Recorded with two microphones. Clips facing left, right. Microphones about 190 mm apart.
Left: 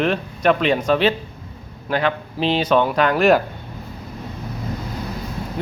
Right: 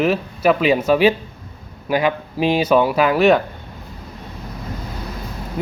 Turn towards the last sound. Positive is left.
turn(degrees=-5)  # may be behind; listen again after turning